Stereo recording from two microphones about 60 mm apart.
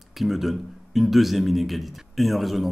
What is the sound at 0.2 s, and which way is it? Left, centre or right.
A man's voice, centre.